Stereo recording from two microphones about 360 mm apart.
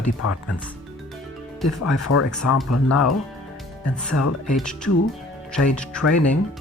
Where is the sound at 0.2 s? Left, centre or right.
Left.